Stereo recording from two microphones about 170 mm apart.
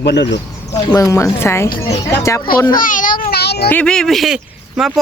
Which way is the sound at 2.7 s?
50° left (ahead or behind).